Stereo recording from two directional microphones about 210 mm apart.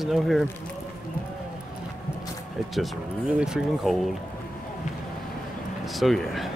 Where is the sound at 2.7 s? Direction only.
Centre (ahead or behind).